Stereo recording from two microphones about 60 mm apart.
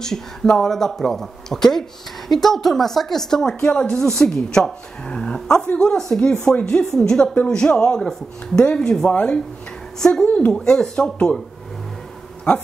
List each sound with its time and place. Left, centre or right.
0.0 s speech: centre
9.9 s a woman's voice: centre
10.2 s speech: centre